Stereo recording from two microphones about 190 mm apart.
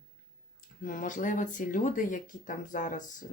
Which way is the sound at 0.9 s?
45° left (ahead or behind).